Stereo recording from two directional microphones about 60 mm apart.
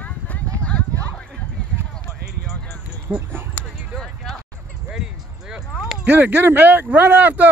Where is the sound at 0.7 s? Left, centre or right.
Centre.